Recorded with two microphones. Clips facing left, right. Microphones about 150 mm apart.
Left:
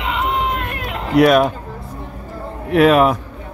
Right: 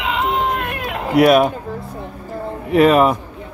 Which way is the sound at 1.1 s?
5° right (ahead or behind).